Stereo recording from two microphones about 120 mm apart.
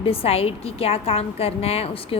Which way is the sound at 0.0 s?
50° left (ahead or behind).